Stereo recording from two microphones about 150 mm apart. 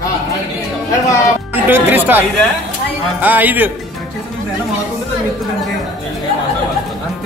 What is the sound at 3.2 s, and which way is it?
Speech, 10° right (ahead or behind).